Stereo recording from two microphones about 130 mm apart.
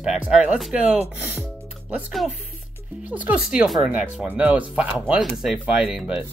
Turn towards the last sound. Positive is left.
turn(degrees=-10)  # may be behind; listen again after turning